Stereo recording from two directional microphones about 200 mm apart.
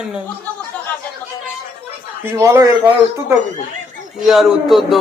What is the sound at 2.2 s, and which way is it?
Speech, 15° right (ahead or behind).